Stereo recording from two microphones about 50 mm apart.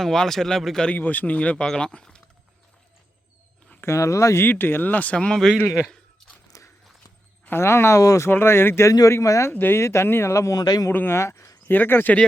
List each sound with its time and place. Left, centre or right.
0.0 s speech: centre
0.9 s speech: left
1.6 s speech: centre
3.8 s speech: left
4.4 s speech: left
5.1 s speech: left
6.5 s clip-clop: left
7.6 s speech: left
8.3 s speech: left
9.5 s speech: left
9.8 s speech: left
10.3 s speech: left
11.1 s speech: left
11.7 s speech: left